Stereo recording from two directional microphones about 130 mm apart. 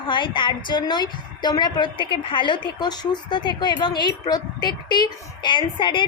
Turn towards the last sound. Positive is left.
turn(degrees=40)  # may be behind; listen again after turning